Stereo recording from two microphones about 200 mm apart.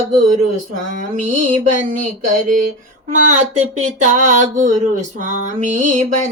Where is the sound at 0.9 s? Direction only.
40° right (ahead or behind).